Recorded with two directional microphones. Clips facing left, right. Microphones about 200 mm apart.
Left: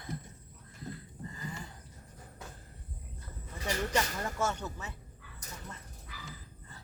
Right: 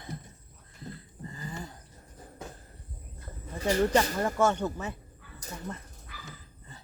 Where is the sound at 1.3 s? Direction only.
35° right (ahead or behind).